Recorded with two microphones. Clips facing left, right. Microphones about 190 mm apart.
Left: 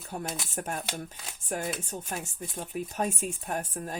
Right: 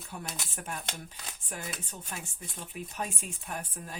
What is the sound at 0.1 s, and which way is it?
Speech, 45° left (ahead or behind).